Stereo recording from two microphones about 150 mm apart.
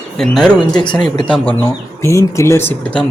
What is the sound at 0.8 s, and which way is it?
Speech, 30° left (ahead or behind).